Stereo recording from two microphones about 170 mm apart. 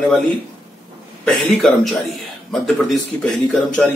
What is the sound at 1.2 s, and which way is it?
Speech, centre (ahead or behind).